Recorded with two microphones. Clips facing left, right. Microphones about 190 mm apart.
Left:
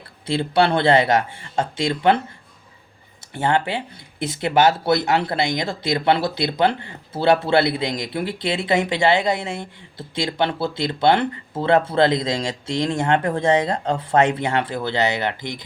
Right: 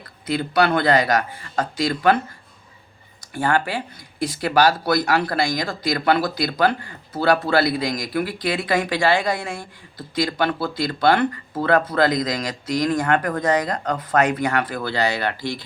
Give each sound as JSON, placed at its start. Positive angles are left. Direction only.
{"t": 0.3, "sound": "speech", "side_deg": 25}
{"t": 3.3, "sound": "speech", "side_deg": 25}